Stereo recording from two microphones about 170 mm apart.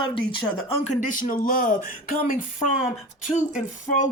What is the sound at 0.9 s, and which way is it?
Speech, 50° left (ahead or behind).